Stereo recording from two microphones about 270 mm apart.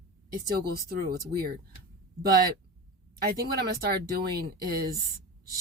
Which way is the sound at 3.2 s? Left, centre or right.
Right.